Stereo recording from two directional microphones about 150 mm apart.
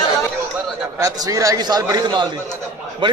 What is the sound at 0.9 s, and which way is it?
A man's voice, 25° right (ahead or behind).